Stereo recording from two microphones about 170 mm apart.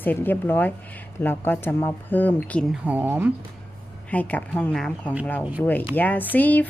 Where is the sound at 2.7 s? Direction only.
10° right (ahead or behind).